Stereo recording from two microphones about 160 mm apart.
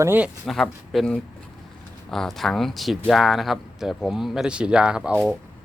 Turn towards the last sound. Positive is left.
turn(degrees=-5)  # may be behind; listen again after turning